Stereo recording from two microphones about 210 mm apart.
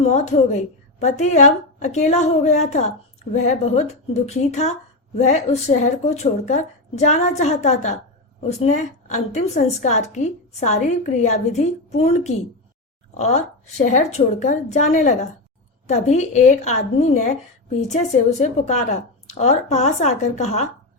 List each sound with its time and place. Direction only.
0.0 s a woman's voice: 30° left (ahead or behind)